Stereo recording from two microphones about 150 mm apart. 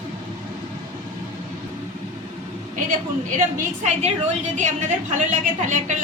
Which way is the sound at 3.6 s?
50° right (ahead or behind).